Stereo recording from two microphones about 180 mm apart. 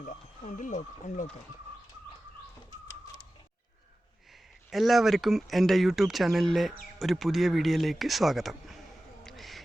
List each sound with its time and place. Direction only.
0.0 s speech: 45° left (ahead or behind)
4.7 s speech: centre (ahead or behind)
9.2 s a sound: centre (ahead or behind)